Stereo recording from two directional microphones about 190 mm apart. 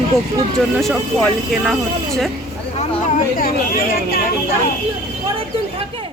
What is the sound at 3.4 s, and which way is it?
Speech, 50° left (ahead or behind).